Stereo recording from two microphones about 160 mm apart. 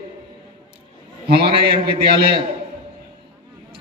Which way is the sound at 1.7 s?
80° right.